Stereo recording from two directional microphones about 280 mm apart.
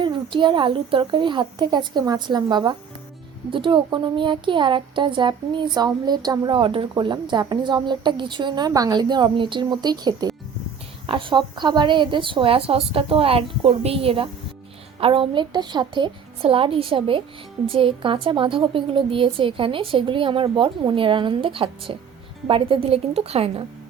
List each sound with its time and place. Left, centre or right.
0.0 s a woman's voice: centre